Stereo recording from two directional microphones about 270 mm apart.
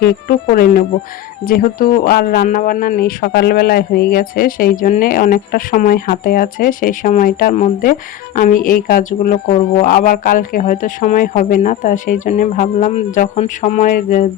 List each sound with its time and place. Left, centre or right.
0.0 s a man's voice: left